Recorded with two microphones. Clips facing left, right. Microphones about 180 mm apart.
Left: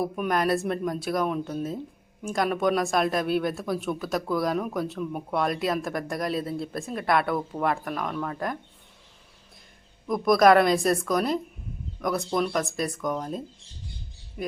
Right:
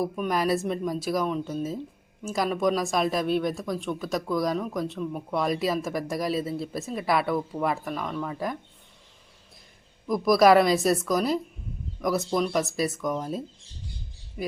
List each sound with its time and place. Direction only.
0.0 s speech: centre (ahead or behind)
10.1 s speech: centre (ahead or behind)